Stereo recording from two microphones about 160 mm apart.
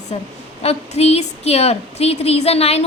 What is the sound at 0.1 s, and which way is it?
A woman's voice, 40° left (ahead or behind).